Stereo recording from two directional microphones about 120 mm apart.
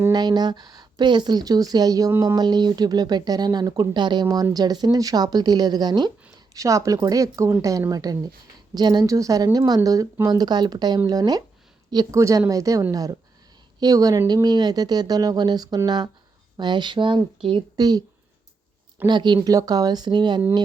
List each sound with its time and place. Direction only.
0.1 s speech: 35° right (ahead or behind)
17.7 s speech: 35° right (ahead or behind)
19.0 s speech: 40° right (ahead or behind)